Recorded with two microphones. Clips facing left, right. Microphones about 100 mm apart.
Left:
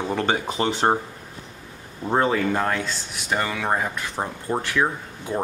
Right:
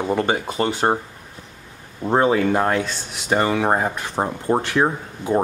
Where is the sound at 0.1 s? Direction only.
15° right (ahead or behind).